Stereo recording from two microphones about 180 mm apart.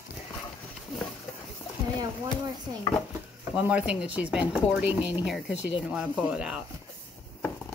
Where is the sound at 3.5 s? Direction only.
5° right (ahead or behind).